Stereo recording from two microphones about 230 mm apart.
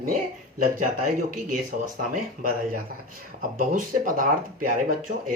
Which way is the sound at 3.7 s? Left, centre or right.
Right.